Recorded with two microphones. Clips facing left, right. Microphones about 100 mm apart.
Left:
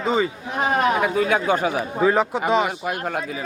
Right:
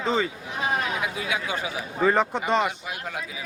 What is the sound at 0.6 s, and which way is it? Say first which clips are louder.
Speech: left 7 dB; 55° left (ahead or behind).